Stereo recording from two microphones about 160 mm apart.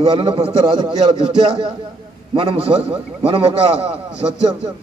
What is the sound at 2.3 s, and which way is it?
A man's voice, 35° right (ahead or behind).